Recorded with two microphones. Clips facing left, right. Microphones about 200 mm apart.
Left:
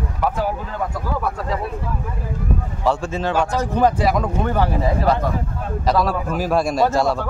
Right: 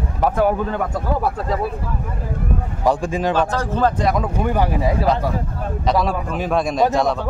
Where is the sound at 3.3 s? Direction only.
15° left (ahead or behind).